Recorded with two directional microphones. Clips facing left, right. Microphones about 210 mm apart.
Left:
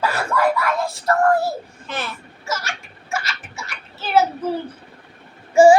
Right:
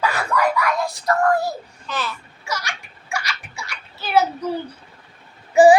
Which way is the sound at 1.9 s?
50° left (ahead or behind).